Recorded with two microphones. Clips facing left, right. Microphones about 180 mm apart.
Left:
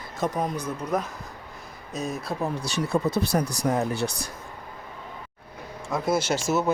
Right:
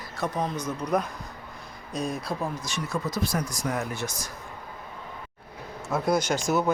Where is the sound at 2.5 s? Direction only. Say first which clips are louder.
Left 6 dB; 35° left (ahead or behind).